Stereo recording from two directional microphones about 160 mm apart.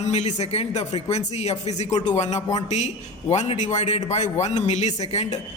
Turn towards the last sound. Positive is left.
turn(degrees=45)  # may be behind; listen again after turning